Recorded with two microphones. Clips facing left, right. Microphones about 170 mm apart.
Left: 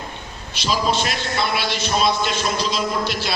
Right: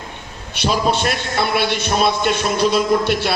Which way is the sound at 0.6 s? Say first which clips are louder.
Right 3 dB; 60° right (ahead or behind).